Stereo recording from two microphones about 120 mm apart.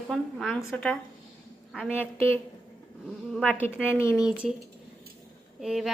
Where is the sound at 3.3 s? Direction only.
5° left (ahead or behind).